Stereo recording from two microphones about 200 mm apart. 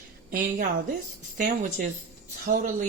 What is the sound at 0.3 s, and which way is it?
A woman's voice, 45° right (ahead or behind).